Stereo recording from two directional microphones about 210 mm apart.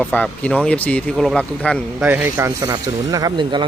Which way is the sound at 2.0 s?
10° right (ahead or behind).